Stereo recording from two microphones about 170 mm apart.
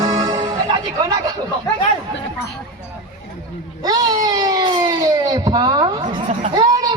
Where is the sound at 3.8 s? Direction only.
20° right (ahead or behind).